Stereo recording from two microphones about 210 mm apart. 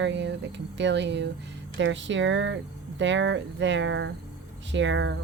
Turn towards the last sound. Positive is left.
turn(degrees=-60)  # may be behind; listen again after turning